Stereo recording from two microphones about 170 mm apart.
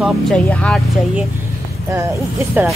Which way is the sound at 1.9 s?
15° right (ahead or behind).